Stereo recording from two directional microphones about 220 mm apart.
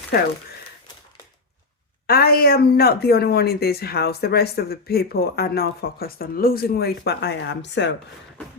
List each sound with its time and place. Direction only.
0.1 s speech: 45° left (ahead or behind)
2.0 s speech: 45° left (ahead or behind)